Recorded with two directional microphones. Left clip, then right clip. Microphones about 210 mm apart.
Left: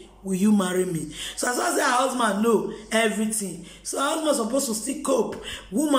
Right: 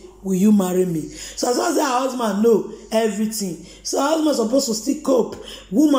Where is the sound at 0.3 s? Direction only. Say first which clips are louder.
Right 5 dB; 5° right (ahead or behind).